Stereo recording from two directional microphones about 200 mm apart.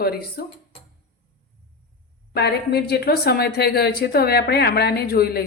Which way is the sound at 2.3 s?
55° left (ahead or behind).